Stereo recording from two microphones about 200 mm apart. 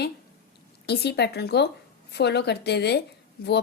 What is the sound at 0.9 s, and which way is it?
A woman's voice, 55° left (ahead or behind).